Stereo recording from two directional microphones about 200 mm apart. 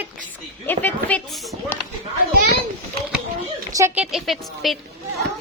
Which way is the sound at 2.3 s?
50° right (ahead or behind).